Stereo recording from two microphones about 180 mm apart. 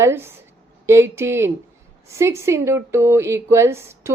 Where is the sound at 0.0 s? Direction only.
15° right (ahead or behind).